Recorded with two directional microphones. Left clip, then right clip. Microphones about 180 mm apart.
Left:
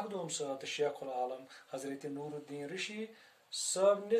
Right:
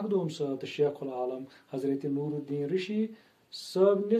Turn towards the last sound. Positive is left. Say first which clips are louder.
# right 5 dB
turn(degrees=15)  # may be behind; listen again after turning